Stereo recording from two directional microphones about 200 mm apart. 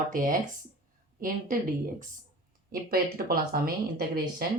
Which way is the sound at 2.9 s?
50° right (ahead or behind).